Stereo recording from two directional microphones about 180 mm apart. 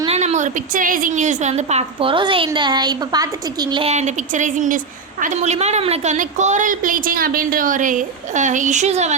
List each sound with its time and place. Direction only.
0.0 s a woman's voice: 35° right (ahead or behind)